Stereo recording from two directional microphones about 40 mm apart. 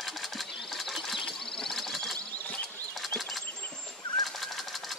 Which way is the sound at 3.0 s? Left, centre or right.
Centre.